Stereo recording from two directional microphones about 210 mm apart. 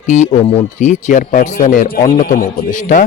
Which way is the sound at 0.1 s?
35° left (ahead or behind).